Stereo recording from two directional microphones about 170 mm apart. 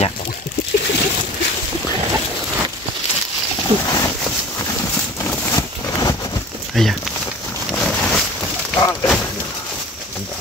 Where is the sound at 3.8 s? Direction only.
20° left (ahead or behind).